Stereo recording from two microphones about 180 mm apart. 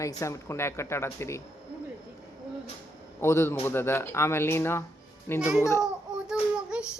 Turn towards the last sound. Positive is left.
turn(degrees=-5)  # may be behind; listen again after turning